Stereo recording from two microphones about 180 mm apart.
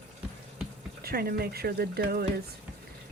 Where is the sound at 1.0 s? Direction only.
55° right (ahead or behind).